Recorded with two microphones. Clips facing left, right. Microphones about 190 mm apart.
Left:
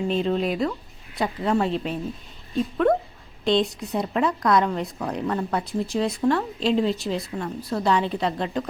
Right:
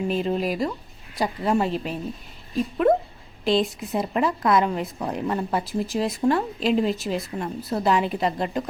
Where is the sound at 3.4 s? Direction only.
5° right (ahead or behind).